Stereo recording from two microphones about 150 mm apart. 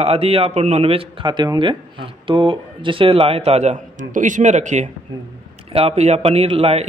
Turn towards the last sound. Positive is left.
turn(degrees=-40)  # may be behind; listen again after turning